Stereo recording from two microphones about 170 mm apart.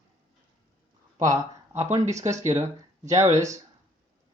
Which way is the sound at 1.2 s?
20° right (ahead or behind).